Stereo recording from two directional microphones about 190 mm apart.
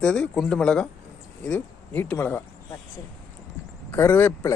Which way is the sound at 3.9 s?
10° left (ahead or behind).